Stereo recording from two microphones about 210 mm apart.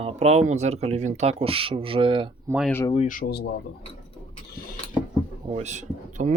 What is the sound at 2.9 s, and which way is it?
Speech, 40° left (ahead or behind).